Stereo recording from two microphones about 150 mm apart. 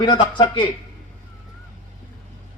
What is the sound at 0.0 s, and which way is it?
Speech, 30° left (ahead or behind).